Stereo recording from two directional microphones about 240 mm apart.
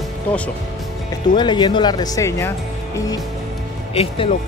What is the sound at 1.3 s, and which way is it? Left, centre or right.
Speech, centre.